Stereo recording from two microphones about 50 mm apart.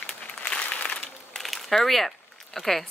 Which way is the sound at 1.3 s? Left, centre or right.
Centre.